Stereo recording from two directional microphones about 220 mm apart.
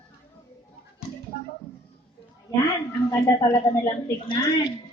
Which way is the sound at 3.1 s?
15° left (ahead or behind).